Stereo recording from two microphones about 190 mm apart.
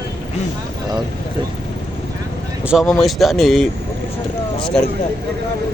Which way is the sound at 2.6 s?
5° right (ahead or behind).